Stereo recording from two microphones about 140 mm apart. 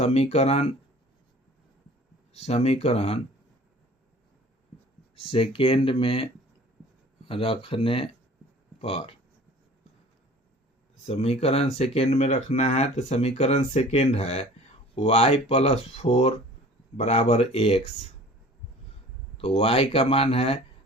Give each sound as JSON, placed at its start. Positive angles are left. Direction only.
{"t": 0.0, "sound": "speech", "side_deg": 50}
{"t": 2.3, "sound": "speech", "side_deg": 50}
{"t": 5.2, "sound": "speech", "side_deg": 40}
{"t": 7.3, "sound": "speech", "side_deg": 40}
{"t": 11.0, "sound": "speech", "side_deg": 45}
{"t": 19.4, "sound": "speech", "side_deg": 45}